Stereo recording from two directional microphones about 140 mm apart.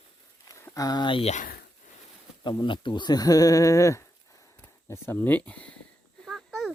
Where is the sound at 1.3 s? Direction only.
70° left (ahead or behind).